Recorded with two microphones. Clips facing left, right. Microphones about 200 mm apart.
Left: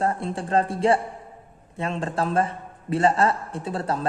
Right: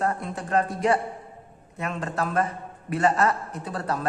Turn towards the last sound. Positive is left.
turn(degrees=25)  # may be behind; listen again after turning